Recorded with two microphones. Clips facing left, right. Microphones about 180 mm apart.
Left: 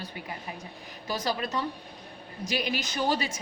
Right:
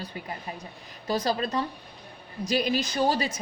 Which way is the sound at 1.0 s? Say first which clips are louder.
Right 4 dB; 30° right (ahead or behind).